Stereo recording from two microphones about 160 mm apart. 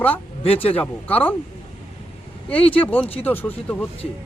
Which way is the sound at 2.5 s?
35° left (ahead or behind).